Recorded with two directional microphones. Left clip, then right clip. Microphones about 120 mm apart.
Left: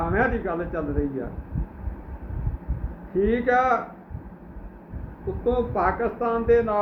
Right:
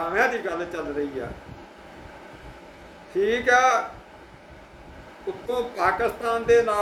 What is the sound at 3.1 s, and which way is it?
Speech, 15° right (ahead or behind).